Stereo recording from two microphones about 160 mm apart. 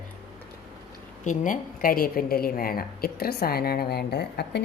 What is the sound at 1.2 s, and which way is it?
A woman's voice, 50° left (ahead or behind).